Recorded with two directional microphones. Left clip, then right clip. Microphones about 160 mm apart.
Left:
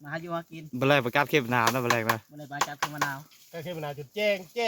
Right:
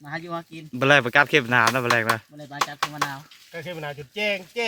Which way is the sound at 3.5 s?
90° left.